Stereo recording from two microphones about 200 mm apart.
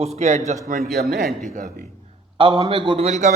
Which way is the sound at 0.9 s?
50° right (ahead or behind).